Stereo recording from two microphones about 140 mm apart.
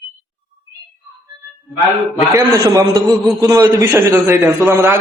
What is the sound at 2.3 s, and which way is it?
A man's voice, 25° right (ahead or behind).